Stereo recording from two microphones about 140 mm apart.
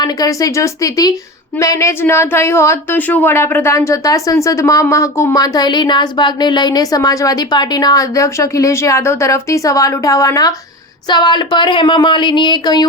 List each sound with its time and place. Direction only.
0.0 s speech: 25° left (ahead or behind)